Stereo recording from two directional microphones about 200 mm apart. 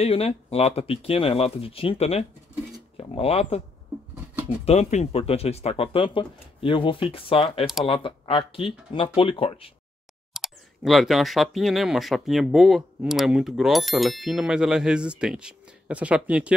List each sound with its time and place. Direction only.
0.0 s speech: 30° left (ahead or behind)
4.6 s speech: 35° left (ahead or behind)
10.3 s speech: centre (ahead or behind)